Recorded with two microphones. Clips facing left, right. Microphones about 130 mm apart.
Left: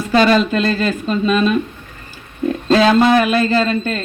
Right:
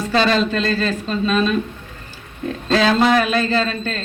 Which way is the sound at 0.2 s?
10° left (ahead or behind).